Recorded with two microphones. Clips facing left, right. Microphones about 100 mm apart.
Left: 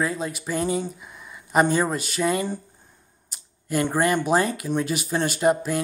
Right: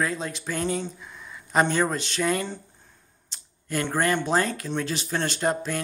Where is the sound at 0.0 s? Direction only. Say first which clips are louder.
Left 2 dB; 5° left (ahead or behind).